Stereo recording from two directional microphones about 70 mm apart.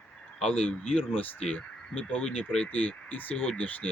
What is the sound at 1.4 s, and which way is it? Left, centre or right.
Speech, centre.